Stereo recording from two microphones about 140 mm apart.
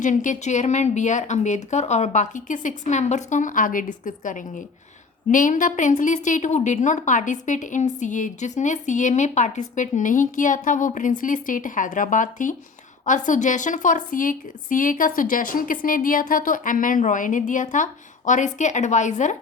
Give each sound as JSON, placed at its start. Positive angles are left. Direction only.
{"t": 0.0, "sound": "a woman's voice", "side_deg": 65}